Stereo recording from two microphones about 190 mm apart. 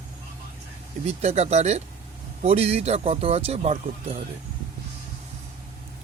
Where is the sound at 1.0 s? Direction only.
35° right (ahead or behind).